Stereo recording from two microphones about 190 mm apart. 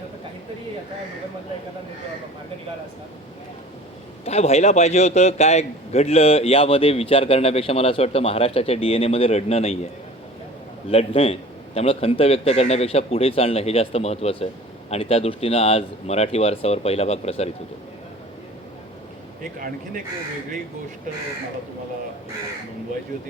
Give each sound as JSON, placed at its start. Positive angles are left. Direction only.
{"t": 4.3, "sound": "a man's voice", "side_deg": 35}
{"t": 10.8, "sound": "a man's voice", "side_deg": 30}